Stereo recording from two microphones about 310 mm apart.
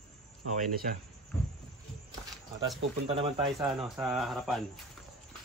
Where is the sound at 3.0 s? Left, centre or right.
Centre.